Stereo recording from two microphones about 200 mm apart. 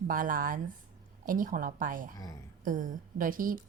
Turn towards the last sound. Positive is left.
turn(degrees=-45)  # may be behind; listen again after turning